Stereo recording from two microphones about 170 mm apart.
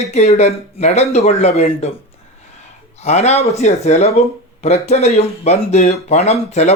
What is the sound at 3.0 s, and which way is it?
A man's voice, 40° left (ahead or behind).